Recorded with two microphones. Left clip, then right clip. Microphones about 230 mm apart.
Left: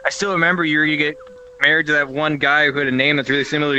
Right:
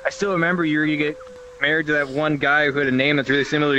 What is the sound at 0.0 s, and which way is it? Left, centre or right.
A man's voice, centre.